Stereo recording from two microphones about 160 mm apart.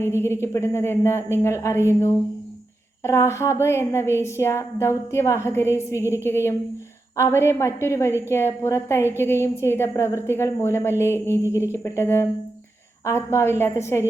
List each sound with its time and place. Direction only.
0.0 s a woman's voice: 15° left (ahead or behind)